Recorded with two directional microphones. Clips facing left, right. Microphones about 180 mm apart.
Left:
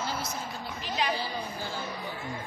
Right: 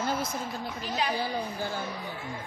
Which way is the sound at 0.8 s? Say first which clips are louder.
Even; 40° right (ahead or behind).